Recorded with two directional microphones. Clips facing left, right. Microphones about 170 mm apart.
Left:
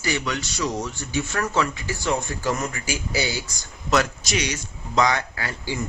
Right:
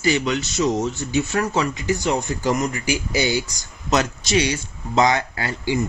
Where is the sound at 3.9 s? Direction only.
25° right (ahead or behind).